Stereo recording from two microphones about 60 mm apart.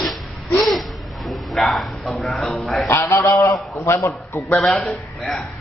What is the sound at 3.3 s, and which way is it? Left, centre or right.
Speech, left.